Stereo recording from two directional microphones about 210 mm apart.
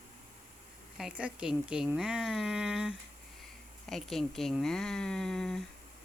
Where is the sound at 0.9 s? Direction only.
5° right (ahead or behind).